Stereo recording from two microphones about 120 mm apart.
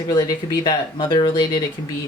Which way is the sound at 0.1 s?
35° left (ahead or behind).